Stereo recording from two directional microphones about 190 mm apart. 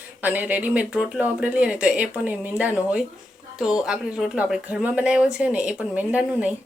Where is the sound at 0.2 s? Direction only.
10° right (ahead or behind).